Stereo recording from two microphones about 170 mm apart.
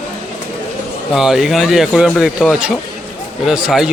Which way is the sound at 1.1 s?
Centre (ahead or behind).